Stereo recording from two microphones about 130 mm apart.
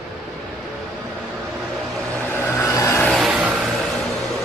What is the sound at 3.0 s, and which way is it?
Vehicle, centre (ahead or behind).